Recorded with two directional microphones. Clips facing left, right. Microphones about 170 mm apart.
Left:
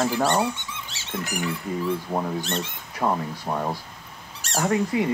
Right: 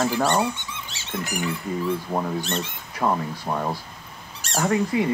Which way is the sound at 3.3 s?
10° left (ahead or behind).